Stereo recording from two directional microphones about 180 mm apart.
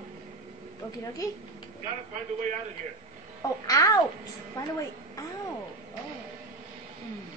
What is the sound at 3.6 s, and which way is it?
Speech, 20° left (ahead or behind).